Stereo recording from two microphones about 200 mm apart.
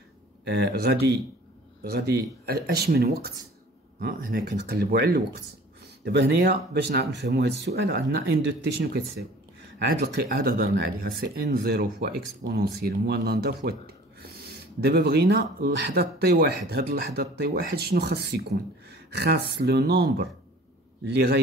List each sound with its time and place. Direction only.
0.5 s speech: 55° right (ahead or behind)
9.8 s speech: 50° right (ahead or behind)